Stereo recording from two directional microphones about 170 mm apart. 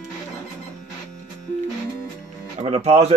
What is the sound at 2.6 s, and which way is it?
Speech, 40° right (ahead or behind).